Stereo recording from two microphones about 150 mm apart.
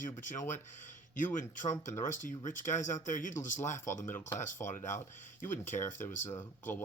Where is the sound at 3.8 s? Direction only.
15° left (ahead or behind).